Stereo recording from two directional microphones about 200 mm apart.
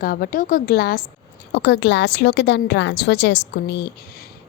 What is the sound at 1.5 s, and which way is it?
A woman's voice, 60° left (ahead or behind).